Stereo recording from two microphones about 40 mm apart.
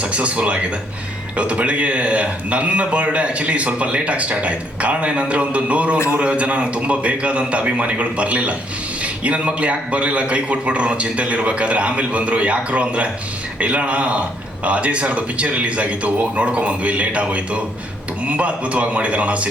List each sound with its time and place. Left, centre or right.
0.0 s speech: right